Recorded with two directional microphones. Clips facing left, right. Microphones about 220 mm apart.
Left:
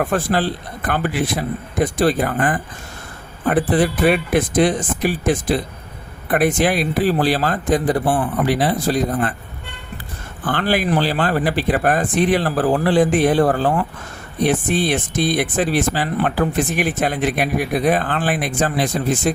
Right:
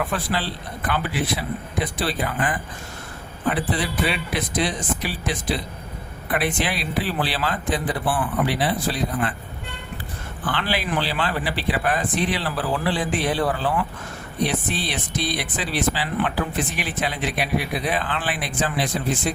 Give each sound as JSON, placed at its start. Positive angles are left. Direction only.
{"t": 0.0, "sound": "speech", "side_deg": 45}
{"t": 10.4, "sound": "speech", "side_deg": 45}